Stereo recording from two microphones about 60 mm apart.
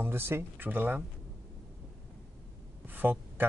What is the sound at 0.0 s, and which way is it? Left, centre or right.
Speech, right.